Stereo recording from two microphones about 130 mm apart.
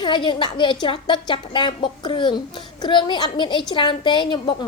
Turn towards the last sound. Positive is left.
turn(degrees=35)  # may be behind; listen again after turning